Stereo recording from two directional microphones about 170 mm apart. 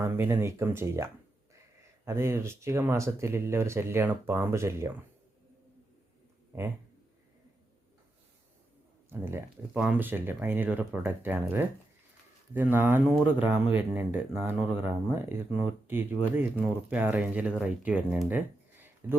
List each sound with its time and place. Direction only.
0.0 s speech: 15° right (ahead or behind)
2.0 s speech: 15° right (ahead or behind)
9.0 s speech: 15° right (ahead or behind)
18.2 s a sound: 10° right (ahead or behind)